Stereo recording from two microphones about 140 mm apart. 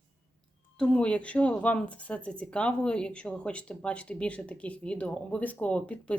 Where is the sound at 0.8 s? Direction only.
10° left (ahead or behind).